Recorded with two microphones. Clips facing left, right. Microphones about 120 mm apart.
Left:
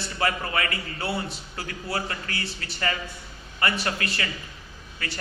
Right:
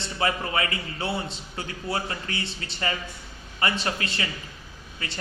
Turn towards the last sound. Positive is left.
turn(degrees=-25)  # may be behind; listen again after turning